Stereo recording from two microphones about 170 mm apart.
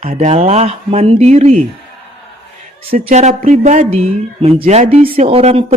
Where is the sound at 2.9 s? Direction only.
50° right (ahead or behind).